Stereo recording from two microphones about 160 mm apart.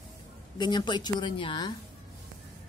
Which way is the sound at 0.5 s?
30° left (ahead or behind).